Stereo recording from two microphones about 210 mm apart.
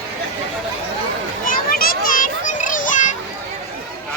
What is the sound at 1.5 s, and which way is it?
Children playing, 45° left (ahead or behind).